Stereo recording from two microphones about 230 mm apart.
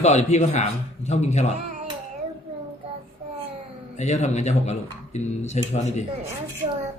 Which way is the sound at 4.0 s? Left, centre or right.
Left.